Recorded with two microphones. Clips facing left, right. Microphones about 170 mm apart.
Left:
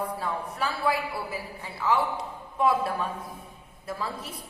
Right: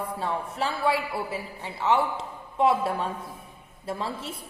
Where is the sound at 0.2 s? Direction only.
25° right (ahead or behind).